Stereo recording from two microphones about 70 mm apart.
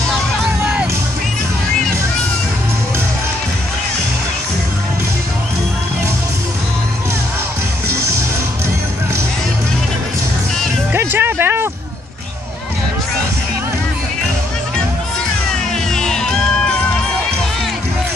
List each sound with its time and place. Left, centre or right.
11.0 s music: right
15.9 s music: centre